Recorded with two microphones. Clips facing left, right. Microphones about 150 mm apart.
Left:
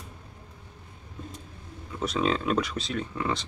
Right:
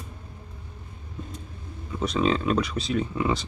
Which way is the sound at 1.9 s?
Centre (ahead or behind).